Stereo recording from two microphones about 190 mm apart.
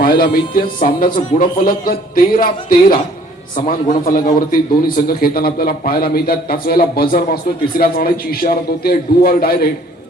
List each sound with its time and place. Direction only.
0.0 s a man's voice: 50° left (ahead or behind)